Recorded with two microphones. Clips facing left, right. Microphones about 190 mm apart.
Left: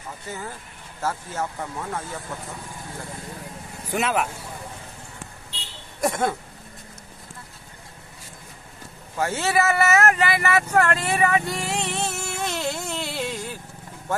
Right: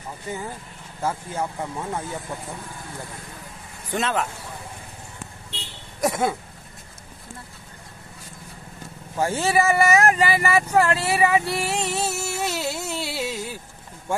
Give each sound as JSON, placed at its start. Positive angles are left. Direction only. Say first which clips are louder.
{"t": 0.3, "sound": "speech", "louder": "right 4 dB", "side_deg": -15}
{"t": 3.9, "sound": "speech", "louder": "left 1 dB", "side_deg": 10}
{"t": 6.0, "sound": "speech", "louder": "right 1 dB", "side_deg": -5}
{"t": 9.1, "sound": "speech", "louder": "right 2 dB", "side_deg": -15}
{"t": 11.4, "sound": "a sound", "louder": "right 2 dB", "side_deg": -5}